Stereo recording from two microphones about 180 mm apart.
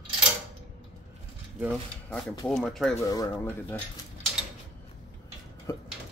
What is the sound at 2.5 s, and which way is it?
Speech, centre (ahead or behind).